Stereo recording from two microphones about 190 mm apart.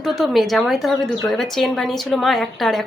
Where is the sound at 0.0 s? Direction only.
Centre (ahead or behind).